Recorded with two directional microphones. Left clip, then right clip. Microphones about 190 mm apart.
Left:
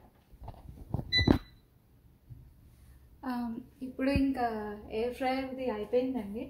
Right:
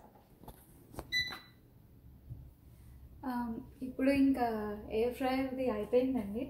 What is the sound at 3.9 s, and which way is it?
A woman's voice, 15° left (ahead or behind).